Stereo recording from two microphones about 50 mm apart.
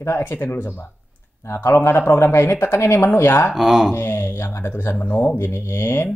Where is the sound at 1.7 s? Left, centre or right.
Left.